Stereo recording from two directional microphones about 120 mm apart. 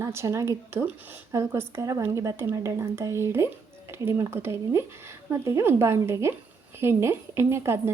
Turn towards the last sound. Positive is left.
turn(degrees=-20)  # may be behind; listen again after turning